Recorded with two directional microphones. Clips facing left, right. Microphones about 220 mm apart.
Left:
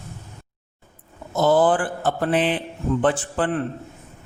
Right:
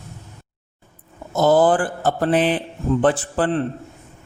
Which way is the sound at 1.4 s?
40° right (ahead or behind).